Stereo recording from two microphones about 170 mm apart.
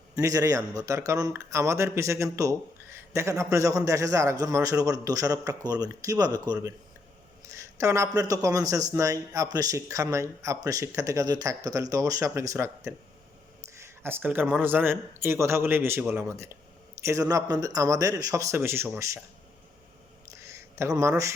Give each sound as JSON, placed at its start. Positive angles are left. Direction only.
{"t": 0.2, "sound": "a man's voice", "side_deg": -20}
{"t": 20.5, "sound": "speech", "side_deg": -15}